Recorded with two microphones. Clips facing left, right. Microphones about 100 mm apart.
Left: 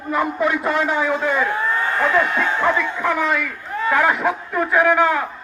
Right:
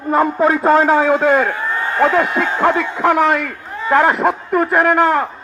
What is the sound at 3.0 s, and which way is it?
A man's voice, 65° right (ahead or behind).